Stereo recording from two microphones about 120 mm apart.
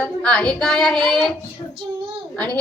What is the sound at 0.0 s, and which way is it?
A woman's voice, 5° left (ahead or behind).